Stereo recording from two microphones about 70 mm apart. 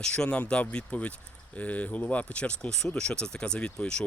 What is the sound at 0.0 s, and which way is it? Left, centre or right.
Speech, centre.